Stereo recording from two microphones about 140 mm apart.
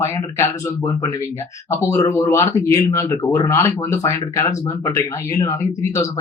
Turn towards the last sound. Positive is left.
turn(degrees=20)  # may be behind; listen again after turning